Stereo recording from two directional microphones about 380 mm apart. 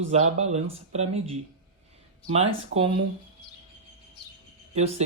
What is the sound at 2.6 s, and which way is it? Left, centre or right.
Speech, centre.